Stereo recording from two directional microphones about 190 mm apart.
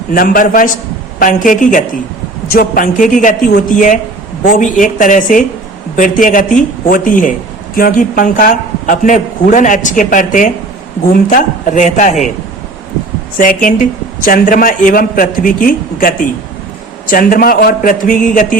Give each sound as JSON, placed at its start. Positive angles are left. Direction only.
{"t": 0.1, "sound": "a man's voice", "side_deg": 45}
{"t": 13.4, "sound": "a man's voice", "side_deg": 45}